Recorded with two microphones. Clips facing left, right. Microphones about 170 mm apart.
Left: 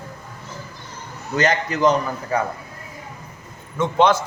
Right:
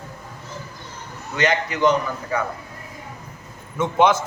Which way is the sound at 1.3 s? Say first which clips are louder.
Left 1 dB; 40° left (ahead or behind).